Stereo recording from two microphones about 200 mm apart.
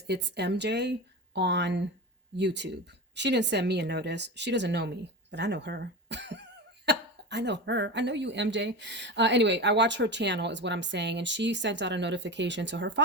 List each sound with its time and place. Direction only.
0.1 s speech: 60° right (ahead or behind)